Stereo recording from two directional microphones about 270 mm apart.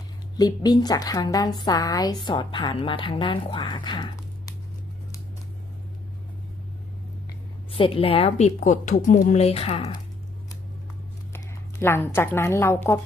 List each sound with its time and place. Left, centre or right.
0.3 s a woman's voice: centre
7.7 s a woman's voice: left
11.8 s a woman's voice: centre